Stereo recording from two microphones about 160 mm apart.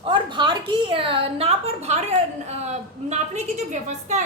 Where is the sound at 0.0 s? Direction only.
30° right (ahead or behind).